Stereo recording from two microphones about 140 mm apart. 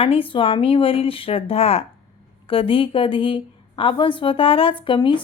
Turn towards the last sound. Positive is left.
turn(degrees=35)  # may be behind; listen again after turning